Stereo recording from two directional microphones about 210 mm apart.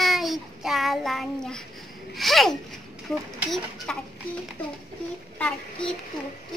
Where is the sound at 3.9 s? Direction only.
5° left (ahead or behind).